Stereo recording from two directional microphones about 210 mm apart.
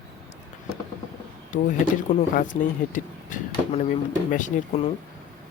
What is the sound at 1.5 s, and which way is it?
Speech, 35° left (ahead or behind).